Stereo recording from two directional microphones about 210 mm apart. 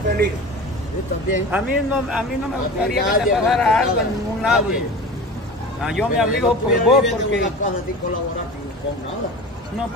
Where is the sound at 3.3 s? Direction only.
Centre (ahead or behind).